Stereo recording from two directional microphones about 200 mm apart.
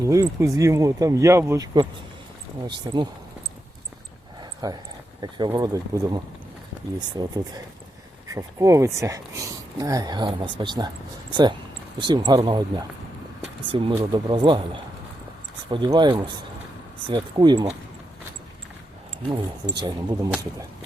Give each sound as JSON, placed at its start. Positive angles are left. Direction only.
{"t": 0.0, "sound": "speech", "side_deg": -15}
{"t": 4.6, "sound": "speech", "side_deg": -20}
{"t": 19.7, "sound": "speech", "side_deg": -20}